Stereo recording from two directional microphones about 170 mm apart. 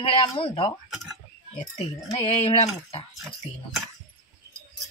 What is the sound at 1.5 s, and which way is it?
A woman's voice, 35° left (ahead or behind).